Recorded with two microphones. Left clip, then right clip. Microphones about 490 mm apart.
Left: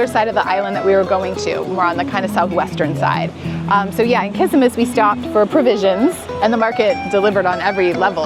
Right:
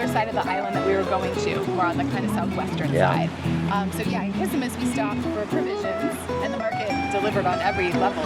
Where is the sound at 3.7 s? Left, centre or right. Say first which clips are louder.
Left 15 dB; left.